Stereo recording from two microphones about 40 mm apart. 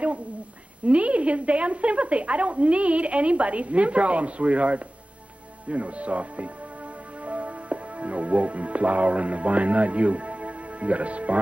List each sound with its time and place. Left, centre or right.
0.8 s a woman's voice: right